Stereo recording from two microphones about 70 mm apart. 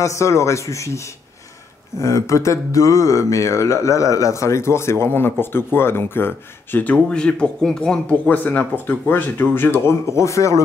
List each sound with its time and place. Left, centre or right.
0.0 s speech: left
7.1 s a man's voice: centre
8.3 s speech: left